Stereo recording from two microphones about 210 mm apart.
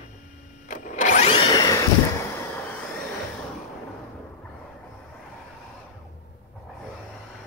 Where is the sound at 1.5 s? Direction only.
15° left (ahead or behind).